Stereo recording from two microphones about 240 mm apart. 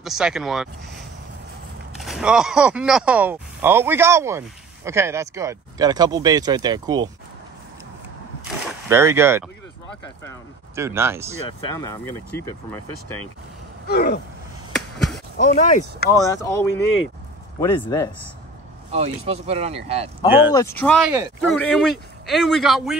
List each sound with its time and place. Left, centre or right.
0.0 s a man's voice: centre
8.8 s speech: centre
10.8 s speech: centre
11.6 s speech: centre
13.8 s speech: left
15.0 s basketball bounce: centre
15.3 s speech: left
16.1 s speech: centre
18.9 s speech: right
20.2 s speech: centre
20.5 s a man's voice: centre
21.1 s speech: centre
21.5 s a man's voice: centre